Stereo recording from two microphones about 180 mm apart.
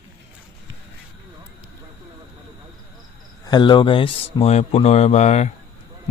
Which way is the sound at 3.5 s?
25° left (ahead or behind).